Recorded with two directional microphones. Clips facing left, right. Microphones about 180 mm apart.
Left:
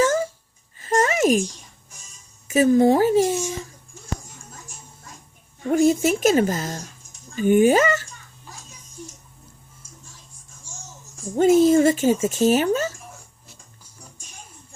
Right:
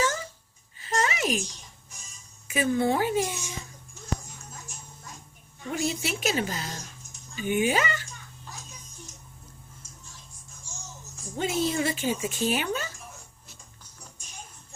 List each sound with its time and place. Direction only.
0.8 s a sound: 45° left (ahead or behind)
2.5 s speech: 40° left (ahead or behind)
5.6 s speech: 45° left (ahead or behind)
11.3 s speech: 45° left (ahead or behind)